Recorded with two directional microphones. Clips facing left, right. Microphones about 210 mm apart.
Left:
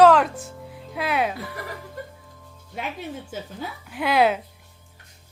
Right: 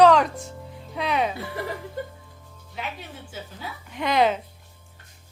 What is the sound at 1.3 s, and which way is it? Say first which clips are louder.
Speech: right 3 dB; 25° right (ahead or behind).